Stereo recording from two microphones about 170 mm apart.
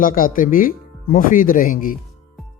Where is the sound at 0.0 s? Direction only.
55° left (ahead or behind).